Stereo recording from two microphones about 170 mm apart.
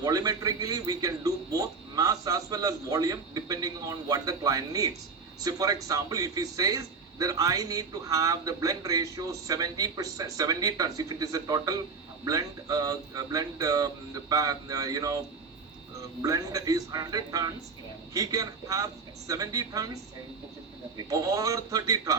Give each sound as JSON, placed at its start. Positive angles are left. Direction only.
{"t": 0.0, "sound": "speech", "side_deg": -20}